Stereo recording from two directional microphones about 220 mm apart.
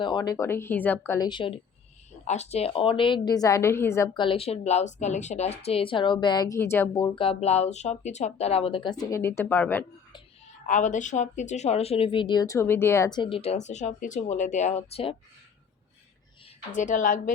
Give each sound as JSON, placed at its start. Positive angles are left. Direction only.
{"t": 0.0, "sound": "a woman's voice", "side_deg": 20}
{"t": 10.7, "sound": "a woman's voice", "side_deg": 35}
{"t": 16.7, "sound": "a woman's voice", "side_deg": 35}